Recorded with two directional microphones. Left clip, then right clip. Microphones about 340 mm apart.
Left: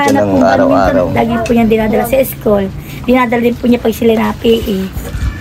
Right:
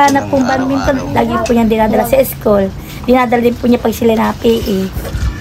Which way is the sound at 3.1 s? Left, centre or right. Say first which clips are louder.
Even; centre.